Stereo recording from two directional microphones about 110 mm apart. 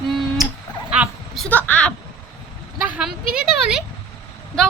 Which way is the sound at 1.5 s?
15° left (ahead or behind).